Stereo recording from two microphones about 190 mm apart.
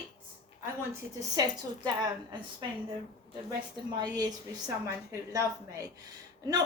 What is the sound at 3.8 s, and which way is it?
A woman's voice, 20° right (ahead or behind).